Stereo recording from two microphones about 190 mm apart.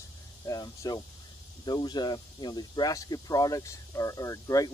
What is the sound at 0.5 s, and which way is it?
Speech, 20° left (ahead or behind).